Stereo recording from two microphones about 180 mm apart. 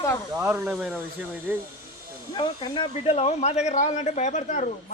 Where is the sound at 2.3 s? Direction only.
25° left (ahead or behind).